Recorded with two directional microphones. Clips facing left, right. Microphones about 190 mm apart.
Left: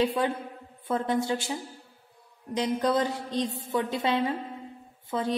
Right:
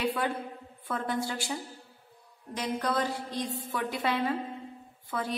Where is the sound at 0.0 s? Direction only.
25° left (ahead or behind).